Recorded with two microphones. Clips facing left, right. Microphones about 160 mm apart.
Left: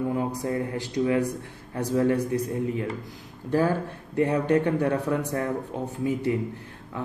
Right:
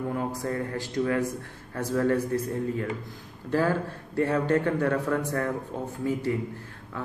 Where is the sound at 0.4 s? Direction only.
15° left (ahead or behind).